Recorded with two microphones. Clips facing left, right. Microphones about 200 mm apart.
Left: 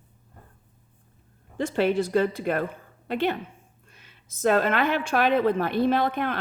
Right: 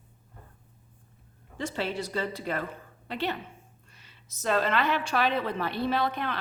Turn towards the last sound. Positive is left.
turn(degrees=50)  # may be behind; listen again after turning